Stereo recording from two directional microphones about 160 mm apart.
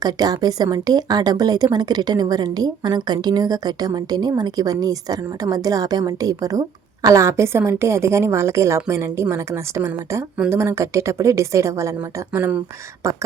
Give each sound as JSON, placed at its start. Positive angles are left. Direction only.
{"t": 0.0, "sound": "a woman's voice", "side_deg": -25}